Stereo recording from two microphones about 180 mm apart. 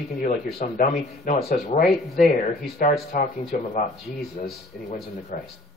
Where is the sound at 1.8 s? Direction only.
Centre (ahead or behind).